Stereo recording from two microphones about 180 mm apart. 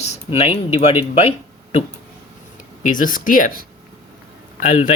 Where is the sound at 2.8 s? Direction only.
45° left (ahead or behind).